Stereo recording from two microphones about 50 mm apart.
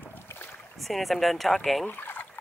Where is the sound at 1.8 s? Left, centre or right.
Left.